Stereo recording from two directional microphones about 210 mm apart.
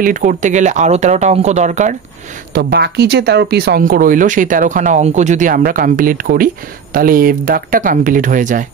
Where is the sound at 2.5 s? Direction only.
50° right (ahead or behind).